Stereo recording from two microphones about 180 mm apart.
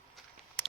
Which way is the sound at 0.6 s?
10° left (ahead or behind).